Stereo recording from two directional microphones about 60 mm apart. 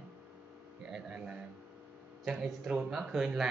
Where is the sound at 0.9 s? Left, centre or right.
Centre.